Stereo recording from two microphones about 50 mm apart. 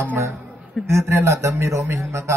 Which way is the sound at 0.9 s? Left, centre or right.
Right.